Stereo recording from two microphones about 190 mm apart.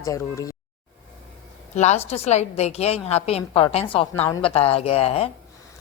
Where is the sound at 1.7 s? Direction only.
35° left (ahead or behind).